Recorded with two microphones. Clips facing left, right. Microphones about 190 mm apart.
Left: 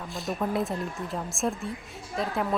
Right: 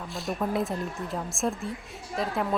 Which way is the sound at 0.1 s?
Centre (ahead or behind).